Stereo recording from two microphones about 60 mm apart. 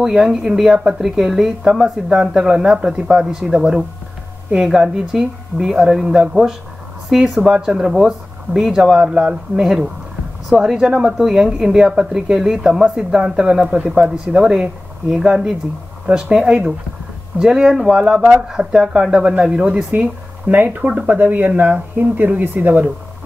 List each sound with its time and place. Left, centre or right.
0.0 s a woman's voice: centre
13.7 s a woman's voice: right
20.5 s speech: right
20.8 s a woman's voice: centre
21.1 s speech: right